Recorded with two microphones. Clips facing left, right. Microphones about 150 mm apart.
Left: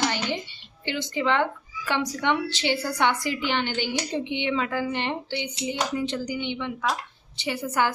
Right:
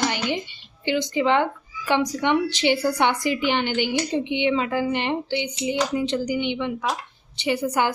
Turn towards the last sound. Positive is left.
turn(degrees=-15)  # may be behind; listen again after turning